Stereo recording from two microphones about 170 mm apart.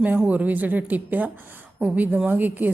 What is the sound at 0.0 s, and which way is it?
A woman's voice, 10° right (ahead or behind).